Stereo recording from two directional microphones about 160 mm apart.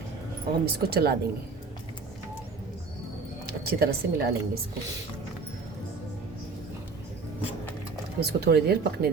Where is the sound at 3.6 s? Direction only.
75° right (ahead or behind).